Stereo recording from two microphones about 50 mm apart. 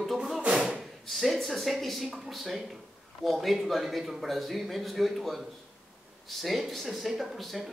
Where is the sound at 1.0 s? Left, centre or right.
Centre.